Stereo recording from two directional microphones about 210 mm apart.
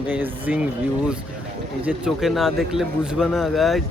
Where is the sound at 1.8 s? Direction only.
5° right (ahead or behind).